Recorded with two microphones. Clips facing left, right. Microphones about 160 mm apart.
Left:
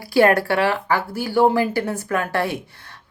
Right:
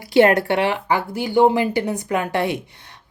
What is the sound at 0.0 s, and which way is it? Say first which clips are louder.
A woman's voice: right 1 dB; 20° right (ahead or behind).